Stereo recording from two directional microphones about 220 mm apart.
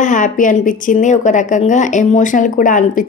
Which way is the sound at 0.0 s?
35° left (ahead or behind).